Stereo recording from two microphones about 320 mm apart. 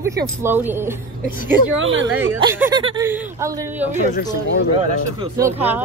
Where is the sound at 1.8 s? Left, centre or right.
Right.